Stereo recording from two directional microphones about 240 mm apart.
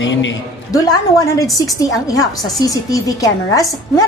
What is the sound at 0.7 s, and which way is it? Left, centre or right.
A woman's voice, centre.